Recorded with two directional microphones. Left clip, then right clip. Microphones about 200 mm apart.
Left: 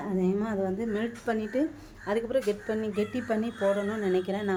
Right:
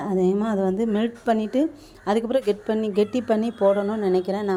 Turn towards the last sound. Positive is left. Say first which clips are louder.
# right 6 dB
turn(degrees=-30)  # may be behind; listen again after turning